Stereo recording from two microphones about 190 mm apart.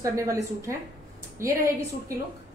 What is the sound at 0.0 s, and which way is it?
A woman's voice, 15° right (ahead or behind).